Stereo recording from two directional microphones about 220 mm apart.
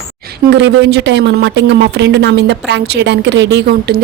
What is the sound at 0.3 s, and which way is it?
A woman's voice, 55° right (ahead or behind).